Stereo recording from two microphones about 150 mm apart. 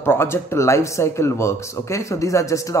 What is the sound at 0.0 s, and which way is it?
Speech, 15° left (ahead or behind).